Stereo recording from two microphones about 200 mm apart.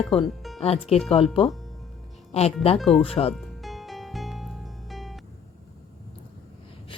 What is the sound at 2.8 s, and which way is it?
Speech, centre (ahead or behind).